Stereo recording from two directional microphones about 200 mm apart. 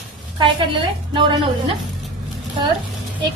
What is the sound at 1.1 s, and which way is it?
Speech, 25° right (ahead or behind).